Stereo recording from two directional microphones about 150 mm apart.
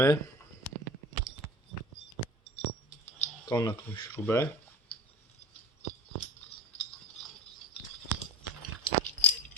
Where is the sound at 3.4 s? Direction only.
25° left (ahead or behind).